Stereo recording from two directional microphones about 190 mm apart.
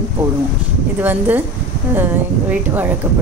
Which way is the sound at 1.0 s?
10° right (ahead or behind).